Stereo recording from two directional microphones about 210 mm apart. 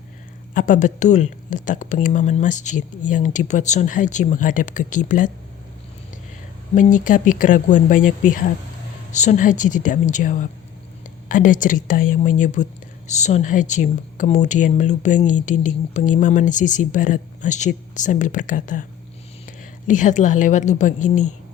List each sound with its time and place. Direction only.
0.5 s speech: 35° left (ahead or behind)
6.7 s speech: 40° left (ahead or behind)
19.9 s speech: 35° left (ahead or behind)